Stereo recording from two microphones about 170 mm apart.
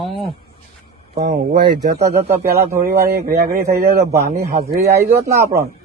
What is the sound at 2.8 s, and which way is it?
Speech, 60° right (ahead or behind).